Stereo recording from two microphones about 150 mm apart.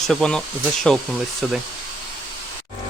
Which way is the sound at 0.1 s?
5° left (ahead or behind).